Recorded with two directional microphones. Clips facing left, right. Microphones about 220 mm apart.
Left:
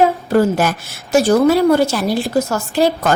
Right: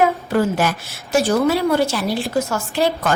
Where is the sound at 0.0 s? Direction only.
40° left (ahead or behind).